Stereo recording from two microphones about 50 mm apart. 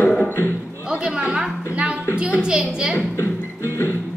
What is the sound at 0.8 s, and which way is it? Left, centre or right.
A woman's voice, centre.